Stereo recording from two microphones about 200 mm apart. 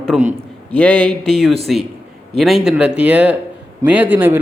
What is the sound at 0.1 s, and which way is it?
A man's voice, centre (ahead or behind).